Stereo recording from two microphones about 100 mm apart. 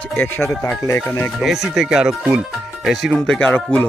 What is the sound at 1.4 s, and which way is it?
Speech, 5° right (ahead or behind).